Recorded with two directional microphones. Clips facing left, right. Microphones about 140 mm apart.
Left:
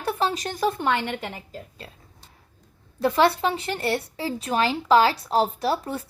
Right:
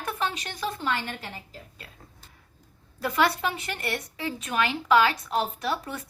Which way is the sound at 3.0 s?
30° left (ahead or behind).